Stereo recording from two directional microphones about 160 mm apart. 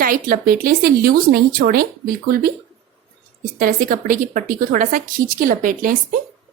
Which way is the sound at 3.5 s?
65° right (ahead or behind).